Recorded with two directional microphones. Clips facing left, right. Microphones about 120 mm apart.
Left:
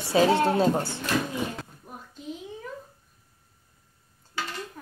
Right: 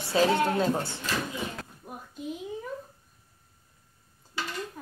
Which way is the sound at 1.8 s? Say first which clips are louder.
Right 1 dB; 15° right (ahead or behind).